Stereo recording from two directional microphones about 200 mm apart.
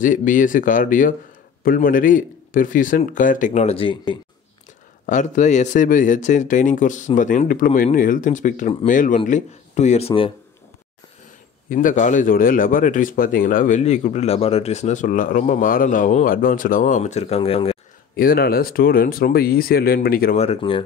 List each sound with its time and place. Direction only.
0.0 s speech: 40° left (ahead or behind); by 4.2 s 25° left (ahead or behind)
5.0 s speech: 40° left (ahead or behind)
11.7 s speech: 40° left (ahead or behind)
18.1 s speech: 45° left (ahead or behind)
20.3 s speech: 30° left (ahead or behind)